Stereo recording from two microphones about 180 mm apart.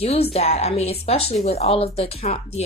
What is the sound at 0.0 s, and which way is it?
A woman's voice, 35° left (ahead or behind).